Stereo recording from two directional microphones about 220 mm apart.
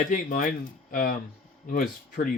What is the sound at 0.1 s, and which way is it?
Speech, 40° left (ahead or behind).